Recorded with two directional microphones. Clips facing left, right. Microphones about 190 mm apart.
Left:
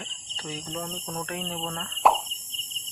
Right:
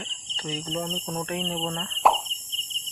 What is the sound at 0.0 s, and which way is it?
Cricket, 5° left (ahead or behind).